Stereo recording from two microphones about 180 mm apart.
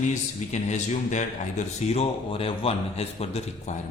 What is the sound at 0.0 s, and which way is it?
A man's voice, 40° left (ahead or behind).